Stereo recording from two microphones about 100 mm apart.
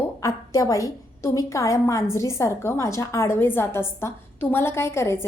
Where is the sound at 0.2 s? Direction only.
35° left (ahead or behind).